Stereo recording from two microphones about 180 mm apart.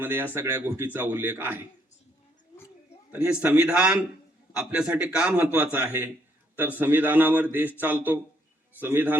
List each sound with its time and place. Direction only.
0.0 s a man's voice: 10° right (ahead or behind)
3.1 s a man's voice: 5° right (ahead or behind)